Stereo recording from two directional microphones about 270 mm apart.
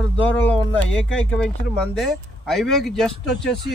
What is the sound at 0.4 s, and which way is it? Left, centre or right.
A man's voice, centre.